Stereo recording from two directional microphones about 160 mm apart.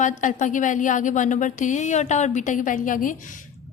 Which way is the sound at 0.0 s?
50° left (ahead or behind).